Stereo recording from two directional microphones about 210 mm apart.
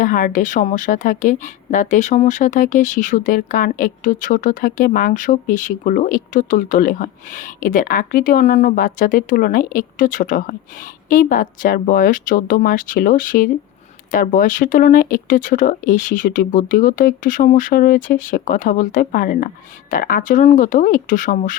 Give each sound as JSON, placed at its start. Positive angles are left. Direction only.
{"t": 0.0, "sound": "a woman's voice", "side_deg": 40}